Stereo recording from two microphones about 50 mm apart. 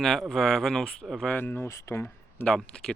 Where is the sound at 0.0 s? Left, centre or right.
Centre.